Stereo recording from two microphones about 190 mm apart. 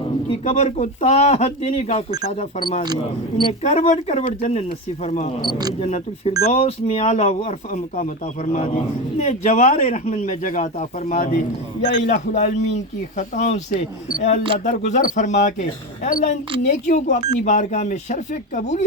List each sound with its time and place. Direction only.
0.3 s a man's voice: 35° left (ahead or behind)
2.6 s speech: 25° left (ahead or behind)
3.6 s a man's voice: 35° left (ahead or behind)